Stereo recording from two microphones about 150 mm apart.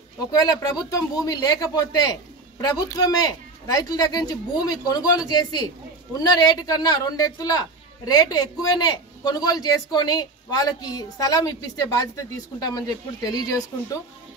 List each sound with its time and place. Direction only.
0.4 s a man's voice: 25° left (ahead or behind)